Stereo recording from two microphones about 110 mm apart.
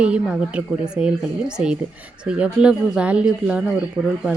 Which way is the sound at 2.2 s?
10° right (ahead or behind).